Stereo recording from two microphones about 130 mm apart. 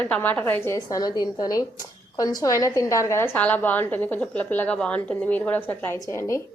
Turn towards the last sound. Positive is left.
turn(degrees=25)  # may be behind; listen again after turning